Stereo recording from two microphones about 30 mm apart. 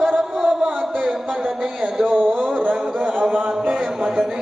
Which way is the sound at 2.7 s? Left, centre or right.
Right.